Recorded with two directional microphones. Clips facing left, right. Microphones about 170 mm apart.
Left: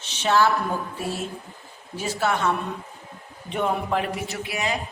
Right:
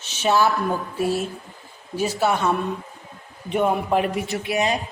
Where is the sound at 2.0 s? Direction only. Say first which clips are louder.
Right 3 dB; 10° right (ahead or behind).